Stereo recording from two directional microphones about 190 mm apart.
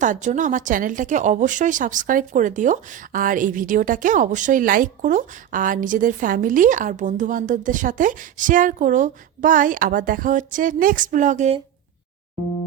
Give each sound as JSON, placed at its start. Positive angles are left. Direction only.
{"t": 0.0, "sound": "speech", "side_deg": -40}